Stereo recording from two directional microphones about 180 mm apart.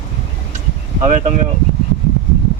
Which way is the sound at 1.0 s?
40° right (ahead or behind).